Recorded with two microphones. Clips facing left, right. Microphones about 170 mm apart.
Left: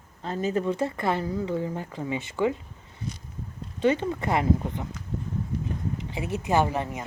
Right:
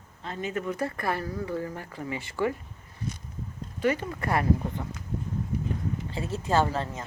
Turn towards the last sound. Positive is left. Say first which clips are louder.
# left 1 dB
turn(degrees=15)  # may be behind; listen again after turning